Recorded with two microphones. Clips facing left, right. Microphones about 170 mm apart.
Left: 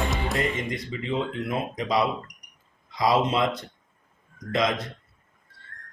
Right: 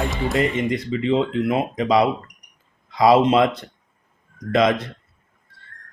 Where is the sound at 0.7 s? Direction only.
75° right (ahead or behind).